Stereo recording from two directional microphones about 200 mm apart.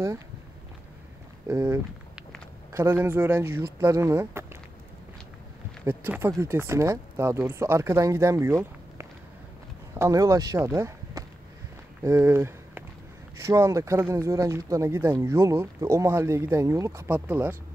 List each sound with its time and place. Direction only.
1.5 s speech: 15° right (ahead or behind)
5.9 s speech: 10° right (ahead or behind)
12.0 s a sound: 10° right (ahead or behind)
13.4 s speech: 15° right (ahead or behind)